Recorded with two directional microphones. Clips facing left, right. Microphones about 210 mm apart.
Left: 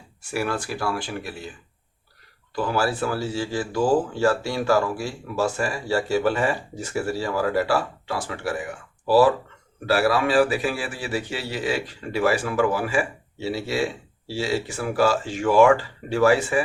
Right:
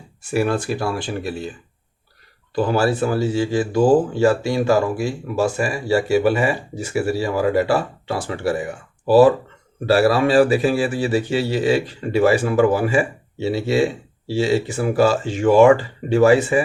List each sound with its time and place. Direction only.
0.2 s a man's voice: 20° right (ahead or behind)
2.6 s a man's voice: 25° right (ahead or behind)